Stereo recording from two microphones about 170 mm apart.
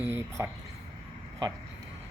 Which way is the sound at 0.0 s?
10° right (ahead or behind).